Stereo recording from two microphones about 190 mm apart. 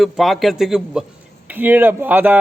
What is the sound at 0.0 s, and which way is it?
Speech, centre (ahead or behind).